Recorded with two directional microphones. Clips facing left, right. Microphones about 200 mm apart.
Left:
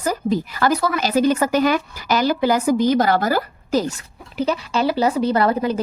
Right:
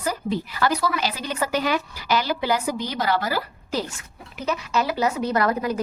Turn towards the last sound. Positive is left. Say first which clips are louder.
# left 4 dB
turn(degrees=30)  # may be behind; listen again after turning